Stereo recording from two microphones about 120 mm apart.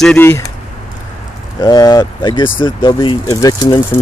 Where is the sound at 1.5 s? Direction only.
30° left (ahead or behind).